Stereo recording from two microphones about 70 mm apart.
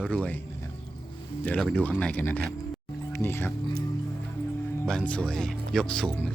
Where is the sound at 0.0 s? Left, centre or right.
Centre.